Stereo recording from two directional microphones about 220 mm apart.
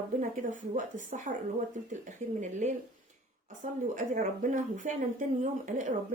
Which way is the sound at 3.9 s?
35° right (ahead or behind).